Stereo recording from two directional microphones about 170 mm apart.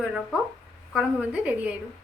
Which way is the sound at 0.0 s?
5° right (ahead or behind).